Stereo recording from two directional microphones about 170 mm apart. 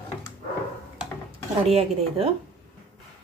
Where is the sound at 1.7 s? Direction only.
35° right (ahead or behind).